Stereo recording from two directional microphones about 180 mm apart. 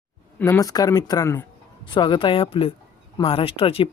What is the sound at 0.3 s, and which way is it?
Speech, 15° left (ahead or behind).